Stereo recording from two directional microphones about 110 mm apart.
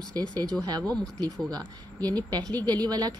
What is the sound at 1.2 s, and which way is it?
Speech, 35° right (ahead or behind).